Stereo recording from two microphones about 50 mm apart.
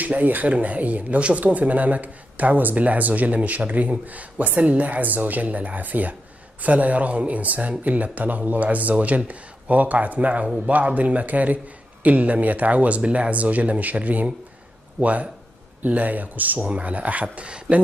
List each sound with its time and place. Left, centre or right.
0.0 s speech: right